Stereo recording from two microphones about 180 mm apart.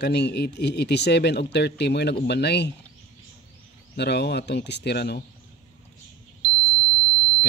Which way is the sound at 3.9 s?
65° left (ahead or behind).